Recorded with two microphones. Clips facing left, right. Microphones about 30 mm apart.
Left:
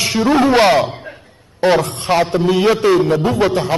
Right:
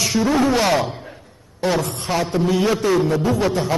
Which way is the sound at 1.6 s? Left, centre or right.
Left.